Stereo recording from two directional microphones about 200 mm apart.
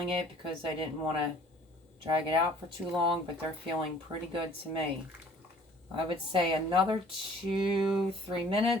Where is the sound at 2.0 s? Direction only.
25° right (ahead or behind).